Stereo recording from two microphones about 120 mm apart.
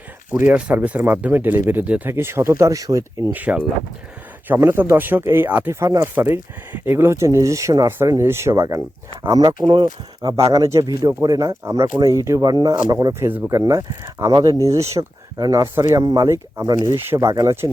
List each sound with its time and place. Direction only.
0.3 s speech: 15° right (ahead or behind)
3.3 s speech: 10° right (ahead or behind)
5.8 s speech: 25° right (ahead or behind)
13.2 s speech: 15° right (ahead or behind)